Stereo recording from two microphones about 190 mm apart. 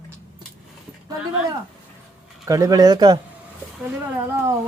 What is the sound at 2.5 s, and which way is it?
Speech, 20° right (ahead or behind).